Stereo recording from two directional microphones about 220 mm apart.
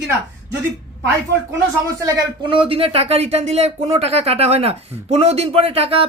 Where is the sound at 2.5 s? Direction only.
25° right (ahead or behind).